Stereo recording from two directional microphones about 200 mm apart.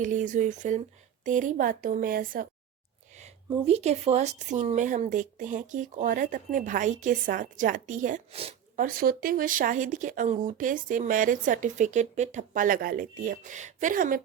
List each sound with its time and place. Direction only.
0.0 s a woman's voice: 40° right (ahead or behind)
3.7 s speech: 30° right (ahead or behind)
8.8 s speech: 45° right (ahead or behind)